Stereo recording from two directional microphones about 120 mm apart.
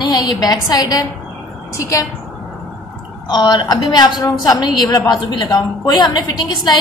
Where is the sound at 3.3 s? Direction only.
35° left (ahead or behind).